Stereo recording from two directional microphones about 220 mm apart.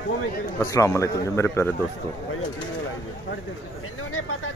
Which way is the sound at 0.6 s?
15° left (ahead or behind).